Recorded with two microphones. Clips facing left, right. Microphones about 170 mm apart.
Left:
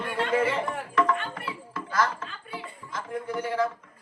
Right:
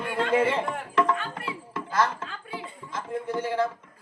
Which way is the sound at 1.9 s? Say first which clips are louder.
Right 1 dB; 25° right (ahead or behind).